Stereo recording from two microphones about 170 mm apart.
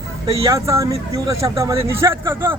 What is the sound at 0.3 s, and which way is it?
A man's voice, 20° right (ahead or behind).